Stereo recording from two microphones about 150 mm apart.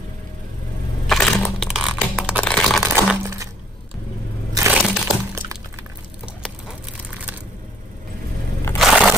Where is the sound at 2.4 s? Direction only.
5° left (ahead or behind).